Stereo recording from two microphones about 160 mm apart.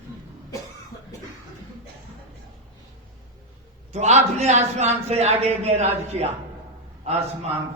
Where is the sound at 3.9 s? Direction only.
45° right (ahead or behind).